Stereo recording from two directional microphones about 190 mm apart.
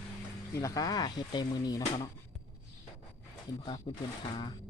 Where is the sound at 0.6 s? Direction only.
20° left (ahead or behind).